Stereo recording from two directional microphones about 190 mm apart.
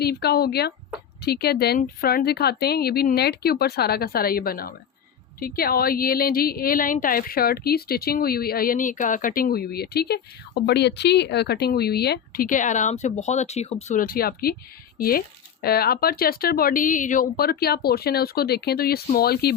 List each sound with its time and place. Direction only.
0.0 s speech: 55° left (ahead or behind)